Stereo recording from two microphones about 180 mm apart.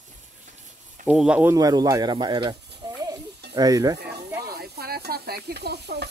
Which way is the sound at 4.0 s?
60° right (ahead or behind).